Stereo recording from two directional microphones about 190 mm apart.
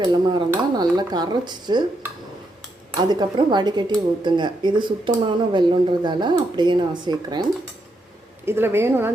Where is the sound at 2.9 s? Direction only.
20° right (ahead or behind).